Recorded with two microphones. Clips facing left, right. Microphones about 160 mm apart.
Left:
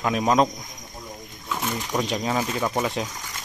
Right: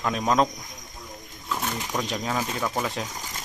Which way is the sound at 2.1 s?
5° left (ahead or behind).